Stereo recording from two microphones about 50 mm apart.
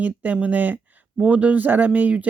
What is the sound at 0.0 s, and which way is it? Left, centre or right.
Speech, right.